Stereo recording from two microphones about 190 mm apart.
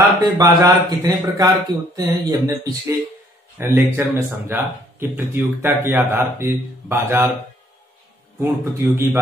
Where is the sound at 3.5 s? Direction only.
10° right (ahead or behind).